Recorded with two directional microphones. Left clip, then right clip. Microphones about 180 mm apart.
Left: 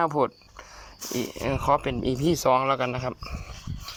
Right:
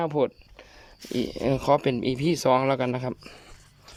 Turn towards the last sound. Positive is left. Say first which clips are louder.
# even
turn(degrees=-40)  # may be behind; listen again after turning